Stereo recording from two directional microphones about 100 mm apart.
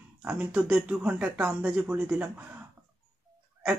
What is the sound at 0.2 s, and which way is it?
Speech, 15° right (ahead or behind).